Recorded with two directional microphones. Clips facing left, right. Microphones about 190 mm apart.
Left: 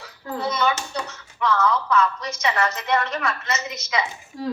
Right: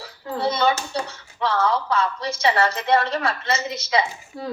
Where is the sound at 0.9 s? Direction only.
30° right (ahead or behind).